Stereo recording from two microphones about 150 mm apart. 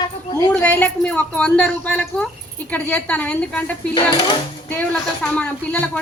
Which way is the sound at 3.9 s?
30° left (ahead or behind).